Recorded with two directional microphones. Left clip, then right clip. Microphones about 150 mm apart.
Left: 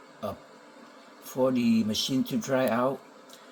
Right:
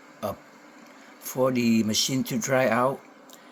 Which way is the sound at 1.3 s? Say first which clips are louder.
Right 2 dB; 30° right (ahead or behind).